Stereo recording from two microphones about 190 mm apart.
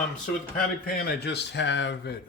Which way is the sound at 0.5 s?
55° left (ahead or behind).